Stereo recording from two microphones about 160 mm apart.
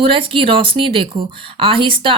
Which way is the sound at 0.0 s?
35° right (ahead or behind).